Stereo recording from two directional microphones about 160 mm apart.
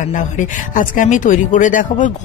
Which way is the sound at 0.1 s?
55° left (ahead or behind).